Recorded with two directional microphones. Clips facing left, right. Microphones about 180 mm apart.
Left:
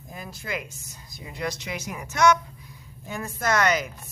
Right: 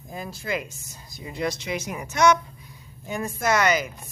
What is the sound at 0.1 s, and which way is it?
A woman's voice, 30° right (ahead or behind).